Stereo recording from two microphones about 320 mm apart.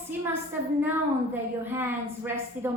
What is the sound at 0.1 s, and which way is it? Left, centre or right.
A woman's voice, centre.